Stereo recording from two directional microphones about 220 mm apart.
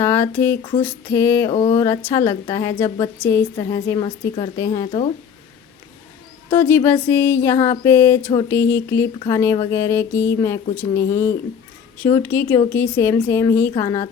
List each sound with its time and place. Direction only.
0.0 s a woman's voice: 10° left (ahead or behind)
1.5 s a sound: 25° left (ahead or behind)
1.7 s a woman's voice: 15° left (ahead or behind)
4.9 s speech: 30° left (ahead or behind)
6.5 s a woman's voice: 10° left (ahead or behind)